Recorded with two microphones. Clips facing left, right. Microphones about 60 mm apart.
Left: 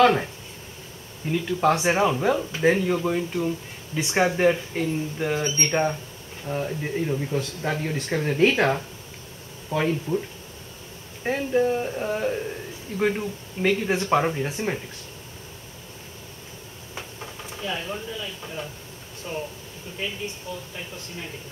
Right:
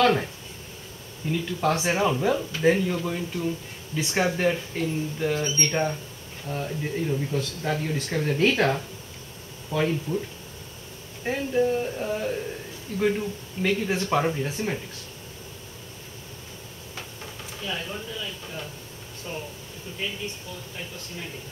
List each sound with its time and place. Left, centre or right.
0.0 s speech: centre
1.3 s speech: centre
11.2 s speech: centre
16.9 s a sound: centre
19.3 s speech: centre